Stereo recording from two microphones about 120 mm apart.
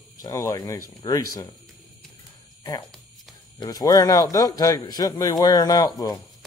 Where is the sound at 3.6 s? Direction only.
30° left (ahead or behind).